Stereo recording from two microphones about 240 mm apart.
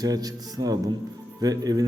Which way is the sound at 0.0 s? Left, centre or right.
Centre.